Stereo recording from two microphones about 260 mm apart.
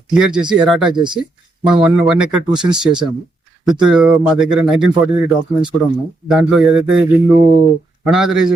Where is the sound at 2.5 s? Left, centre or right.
Centre.